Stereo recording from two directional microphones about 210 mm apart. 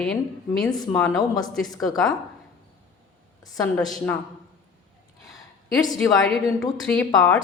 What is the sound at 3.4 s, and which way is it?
Speech, 15° left (ahead or behind).